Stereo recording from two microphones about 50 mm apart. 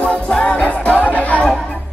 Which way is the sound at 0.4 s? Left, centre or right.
Left.